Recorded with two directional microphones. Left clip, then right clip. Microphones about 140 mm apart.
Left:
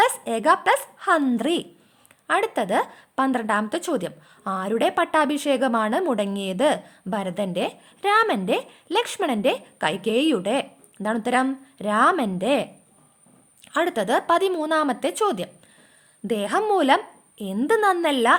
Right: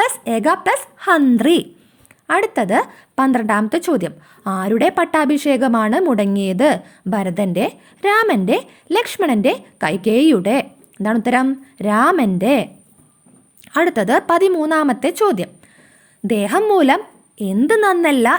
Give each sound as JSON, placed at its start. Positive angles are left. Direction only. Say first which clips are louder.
{"t": 0.0, "sound": "a woman's voice", "louder": "right 3 dB", "side_deg": -30}
{"t": 1.4, "sound": "a woman's voice", "louder": "right 9 dB", "side_deg": -40}